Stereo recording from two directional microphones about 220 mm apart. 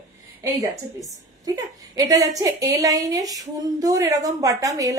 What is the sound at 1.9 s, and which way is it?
Speech, 15° right (ahead or behind).